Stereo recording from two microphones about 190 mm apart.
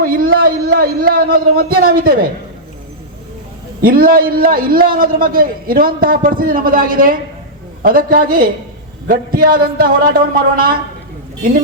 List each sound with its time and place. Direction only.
0.0 s a man's voice: 50° right (ahead or behind)
3.8 s a man's voice: 50° right (ahead or behind)